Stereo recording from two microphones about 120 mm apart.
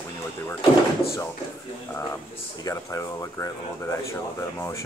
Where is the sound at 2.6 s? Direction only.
25° left (ahead or behind).